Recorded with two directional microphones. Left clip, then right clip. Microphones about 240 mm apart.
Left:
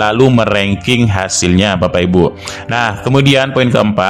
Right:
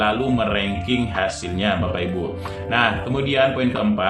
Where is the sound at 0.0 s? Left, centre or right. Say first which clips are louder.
Left 9 dB; left.